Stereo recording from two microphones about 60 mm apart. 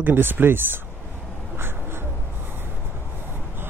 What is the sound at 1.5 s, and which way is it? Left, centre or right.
Crow, right.